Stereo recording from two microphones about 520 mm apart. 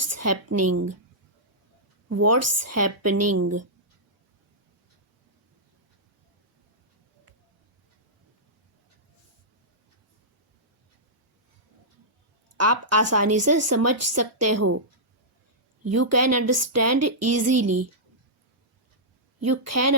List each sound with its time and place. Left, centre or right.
0.0 s a woman's voice: right
2.0 s a woman's voice: right
12.5 s a woman's voice: right
15.8 s a woman's voice: right
19.4 s a woman's voice: right